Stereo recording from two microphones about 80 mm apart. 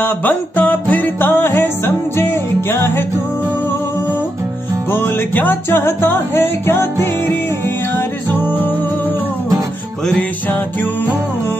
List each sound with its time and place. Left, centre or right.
0.0 s music: left
2.7 s music: left
4.9 s music: left